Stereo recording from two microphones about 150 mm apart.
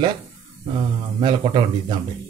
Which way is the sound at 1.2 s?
30° right (ahead or behind).